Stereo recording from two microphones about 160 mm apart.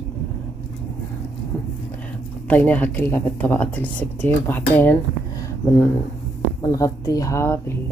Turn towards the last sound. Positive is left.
turn(degrees=15)  # may be behind; listen again after turning